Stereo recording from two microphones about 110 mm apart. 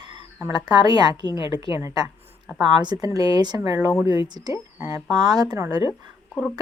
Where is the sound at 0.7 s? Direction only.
40° right (ahead or behind).